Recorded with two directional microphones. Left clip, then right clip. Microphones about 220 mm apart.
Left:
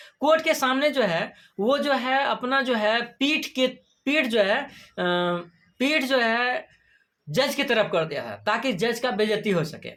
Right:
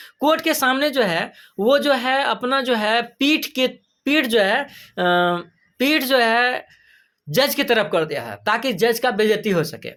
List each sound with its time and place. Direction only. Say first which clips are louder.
0.0 s speech: right 2 dB; 40° right (ahead or behind)